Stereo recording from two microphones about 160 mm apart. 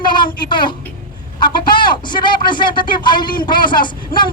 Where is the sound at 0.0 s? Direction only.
30° left (ahead or behind).